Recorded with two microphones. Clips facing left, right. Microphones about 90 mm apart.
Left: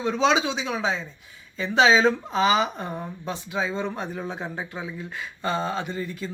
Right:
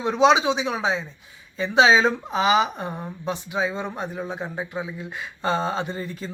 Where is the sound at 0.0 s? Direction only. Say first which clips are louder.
Right 4 dB; 20° right (ahead or behind); by 4.8 s 5° right (ahead or behind).